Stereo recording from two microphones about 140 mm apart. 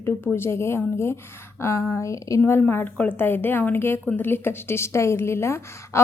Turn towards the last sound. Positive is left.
turn(degrees=20)  # may be behind; listen again after turning